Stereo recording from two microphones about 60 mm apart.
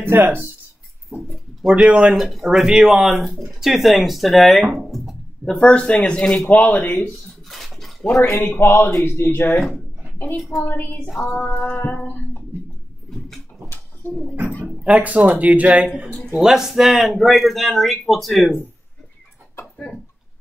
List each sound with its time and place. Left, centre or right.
0.0 s speech: right
1.6 s speech: centre
2.2 s speech: centre
5.5 s speech: centre
7.4 s dog: centre
8.5 s female singing: left
9.0 s speech: left
10.5 s female singing: left
14.0 s female singing: left
14.9 s speech: right
16.3 s speech: centre